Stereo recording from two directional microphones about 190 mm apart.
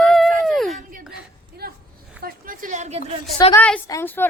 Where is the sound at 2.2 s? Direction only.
50° right (ahead or behind).